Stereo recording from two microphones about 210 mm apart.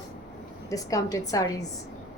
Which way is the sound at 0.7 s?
15° left (ahead or behind).